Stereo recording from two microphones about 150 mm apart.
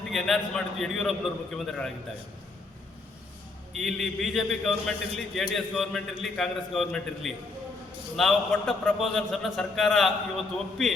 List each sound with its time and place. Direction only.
0.1 s a man's voice: centre (ahead or behind)
3.7 s a man's voice: centre (ahead or behind)